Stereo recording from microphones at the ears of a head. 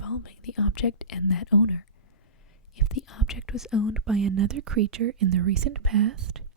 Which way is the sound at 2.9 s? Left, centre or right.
Left.